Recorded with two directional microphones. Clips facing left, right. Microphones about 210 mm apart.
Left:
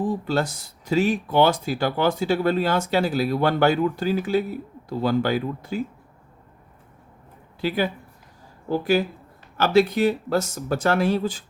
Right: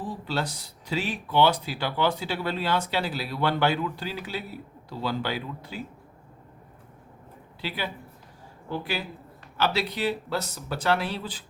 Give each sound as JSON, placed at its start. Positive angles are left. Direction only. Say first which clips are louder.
{"t": 0.0, "sound": "speech", "louder": "left 7 dB", "side_deg": 45}
{"t": 7.6, "sound": "speech", "louder": "left 9 dB", "side_deg": 45}